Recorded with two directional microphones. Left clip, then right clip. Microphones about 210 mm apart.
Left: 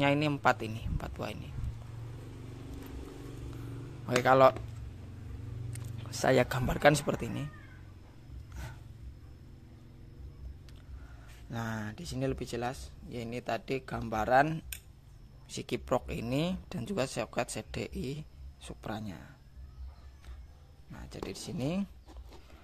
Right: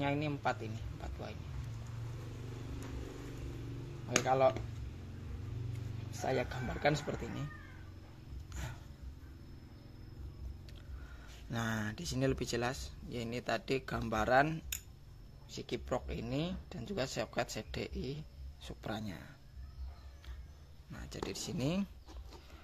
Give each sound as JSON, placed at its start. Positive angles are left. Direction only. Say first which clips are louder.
{"t": 0.0, "sound": "speech", "louder": "left 8 dB", "side_deg": 35}
{"t": 4.2, "sound": "speech", "louder": "left 7 dB", "side_deg": 40}
{"t": 6.2, "sound": "speech", "louder": "left 9 dB", "side_deg": 40}
{"t": 11.5, "sound": "speech", "louder": "even", "side_deg": 5}
{"t": 20.9, "sound": "speech", "louder": "left 1 dB", "side_deg": 10}